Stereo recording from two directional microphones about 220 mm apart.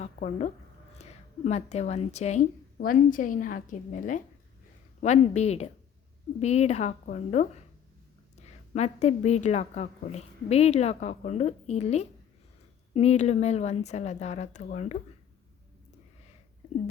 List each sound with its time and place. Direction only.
0.0 s a woman's voice: 30° left (ahead or behind)
8.7 s a woman's voice: 30° left (ahead or behind)